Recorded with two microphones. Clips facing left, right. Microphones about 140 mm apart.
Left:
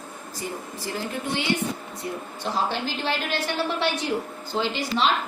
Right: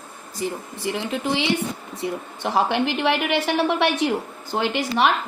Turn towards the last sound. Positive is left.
turn(degrees=-65)  # may be behind; listen again after turning